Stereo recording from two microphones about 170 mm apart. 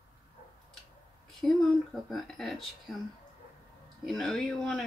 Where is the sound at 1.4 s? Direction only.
Centre (ahead or behind).